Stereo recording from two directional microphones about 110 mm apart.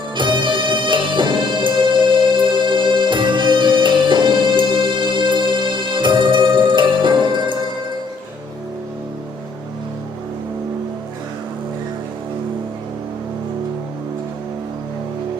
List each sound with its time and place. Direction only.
0.2 s music: 45° right (ahead or behind)